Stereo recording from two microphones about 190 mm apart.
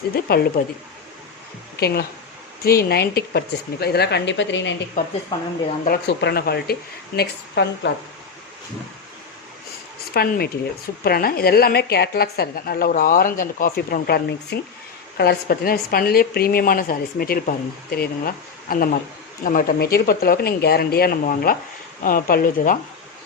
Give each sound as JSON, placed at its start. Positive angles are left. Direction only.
{"t": 0.1, "sound": "speech", "side_deg": 55}
{"t": 1.8, "sound": "speech", "side_deg": 55}
{"t": 5.0, "sound": "a woman's voice", "side_deg": 45}
{"t": 5.8, "sound": "speech", "side_deg": 55}
{"t": 10.2, "sound": "a woman's voice", "side_deg": 55}